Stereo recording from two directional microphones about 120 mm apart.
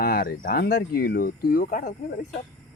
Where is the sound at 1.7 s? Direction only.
90° left.